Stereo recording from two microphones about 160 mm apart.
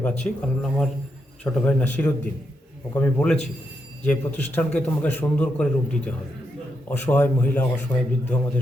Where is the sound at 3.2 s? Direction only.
5° left (ahead or behind).